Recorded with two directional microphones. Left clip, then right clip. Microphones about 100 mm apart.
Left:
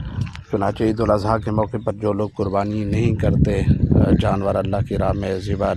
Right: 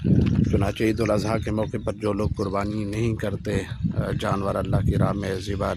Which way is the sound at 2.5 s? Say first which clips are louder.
Left 5 dB; 35° left (ahead or behind).